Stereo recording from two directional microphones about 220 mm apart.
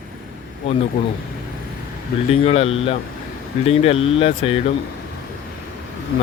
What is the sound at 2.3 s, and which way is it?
Speech, 30° left (ahead or behind).